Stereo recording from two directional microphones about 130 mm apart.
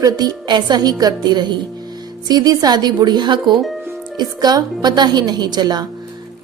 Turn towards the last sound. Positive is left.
turn(degrees=-35)  # may be behind; listen again after turning